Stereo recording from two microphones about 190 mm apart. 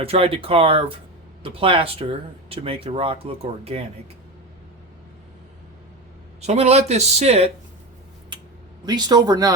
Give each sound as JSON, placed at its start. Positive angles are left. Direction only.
{"t": 0.0, "sound": "speech", "side_deg": -30}
{"t": 6.4, "sound": "speech", "side_deg": -35}
{"t": 8.9, "sound": "speech", "side_deg": -20}